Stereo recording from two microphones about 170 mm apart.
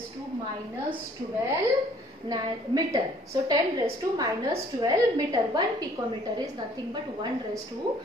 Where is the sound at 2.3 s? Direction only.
25° right (ahead or behind).